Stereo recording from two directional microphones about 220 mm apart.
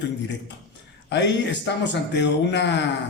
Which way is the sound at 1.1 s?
50° left (ahead or behind).